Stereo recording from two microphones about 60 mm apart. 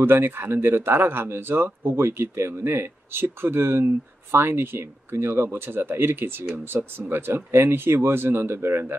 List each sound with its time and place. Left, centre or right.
0.0 s speech: right